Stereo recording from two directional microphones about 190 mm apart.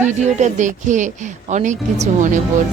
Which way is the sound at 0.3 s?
40° right (ahead or behind).